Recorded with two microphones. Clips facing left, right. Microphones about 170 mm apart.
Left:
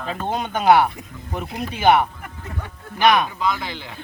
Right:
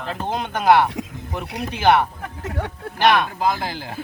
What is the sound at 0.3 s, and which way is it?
Speech, centre (ahead or behind).